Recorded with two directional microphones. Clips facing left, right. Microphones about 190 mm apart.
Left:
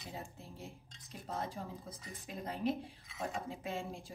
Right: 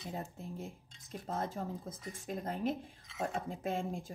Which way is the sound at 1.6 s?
50° right (ahead or behind).